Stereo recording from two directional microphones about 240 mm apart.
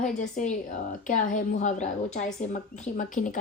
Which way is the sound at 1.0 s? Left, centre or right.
Left.